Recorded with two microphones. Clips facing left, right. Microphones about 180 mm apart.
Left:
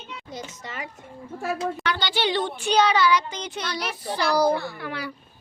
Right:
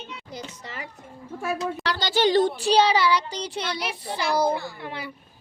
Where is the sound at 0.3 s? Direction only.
35° right (ahead or behind).